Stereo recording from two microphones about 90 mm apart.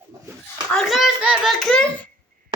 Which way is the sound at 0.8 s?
Centre (ahead or behind).